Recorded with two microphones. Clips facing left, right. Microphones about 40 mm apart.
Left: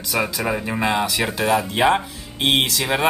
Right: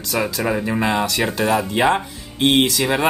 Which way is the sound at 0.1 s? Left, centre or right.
Centre.